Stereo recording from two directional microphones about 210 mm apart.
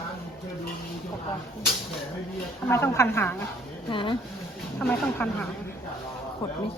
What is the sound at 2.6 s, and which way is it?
Speech, 10° left (ahead or behind).